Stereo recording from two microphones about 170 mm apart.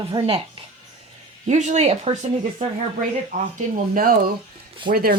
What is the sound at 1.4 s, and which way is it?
Speech, 45° right (ahead or behind).